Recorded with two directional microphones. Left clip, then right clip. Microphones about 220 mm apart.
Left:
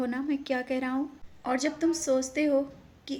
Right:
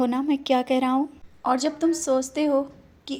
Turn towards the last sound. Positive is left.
turn(degrees=-15)  # may be behind; listen again after turning